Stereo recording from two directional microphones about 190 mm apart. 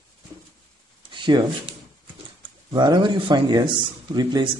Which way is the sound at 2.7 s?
25° right (ahead or behind).